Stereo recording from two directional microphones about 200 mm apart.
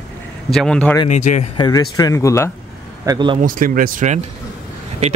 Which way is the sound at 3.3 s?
45° right (ahead or behind).